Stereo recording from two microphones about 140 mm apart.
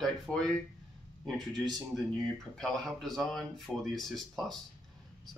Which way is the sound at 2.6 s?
5° left (ahead or behind).